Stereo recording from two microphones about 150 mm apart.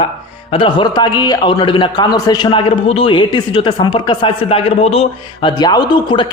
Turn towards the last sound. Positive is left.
turn(degrees=30)  # may be behind; listen again after turning